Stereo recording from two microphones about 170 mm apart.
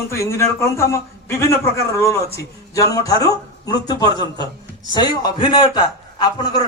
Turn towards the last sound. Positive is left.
turn(degrees=25)  # may be behind; listen again after turning